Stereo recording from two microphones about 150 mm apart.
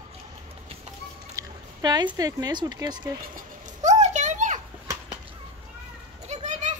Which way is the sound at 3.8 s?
50° right (ahead or behind).